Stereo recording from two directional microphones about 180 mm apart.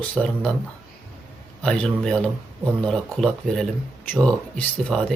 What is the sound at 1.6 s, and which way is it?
Speech, 5° left (ahead or behind).